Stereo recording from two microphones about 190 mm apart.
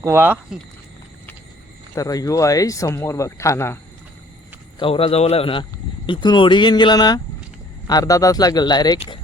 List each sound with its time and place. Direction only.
0.0 s speech: 10° right (ahead or behind)
2.0 s speech: 20° left (ahead or behind)
4.8 s a man's voice: 30° left (ahead or behind)